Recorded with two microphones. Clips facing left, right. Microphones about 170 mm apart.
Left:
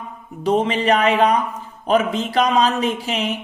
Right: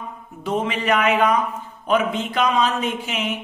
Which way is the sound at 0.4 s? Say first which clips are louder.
Left 5 dB; 35° left (ahead or behind).